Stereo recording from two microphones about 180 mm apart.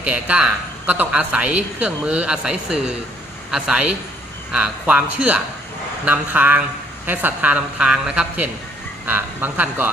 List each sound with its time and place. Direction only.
0.0 s a man's voice: 5° right (ahead or behind)